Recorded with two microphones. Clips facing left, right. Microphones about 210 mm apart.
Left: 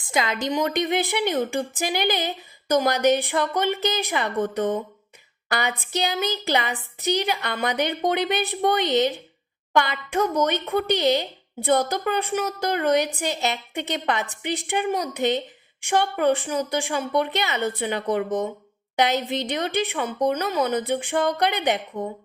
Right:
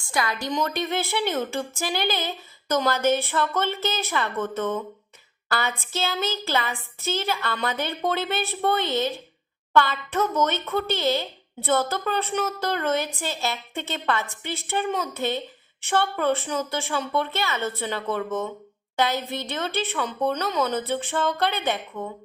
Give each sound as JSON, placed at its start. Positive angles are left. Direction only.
{"t": 0.0, "sound": "a woman's voice", "side_deg": 20}